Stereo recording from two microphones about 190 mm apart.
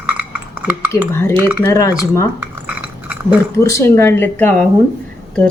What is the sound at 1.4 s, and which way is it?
Speech, 10° right (ahead or behind).